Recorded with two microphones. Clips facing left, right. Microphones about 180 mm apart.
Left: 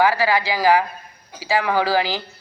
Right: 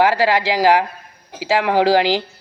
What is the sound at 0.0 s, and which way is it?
Speech, 90° right.